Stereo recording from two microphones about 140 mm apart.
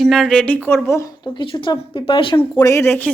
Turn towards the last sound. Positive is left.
turn(degrees=15)  # may be behind; listen again after turning